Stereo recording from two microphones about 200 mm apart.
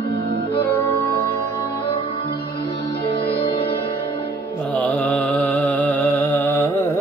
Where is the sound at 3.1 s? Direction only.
25° left (ahead or behind).